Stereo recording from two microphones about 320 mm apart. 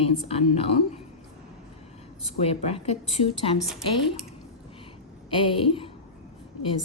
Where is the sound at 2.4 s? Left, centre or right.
Centre.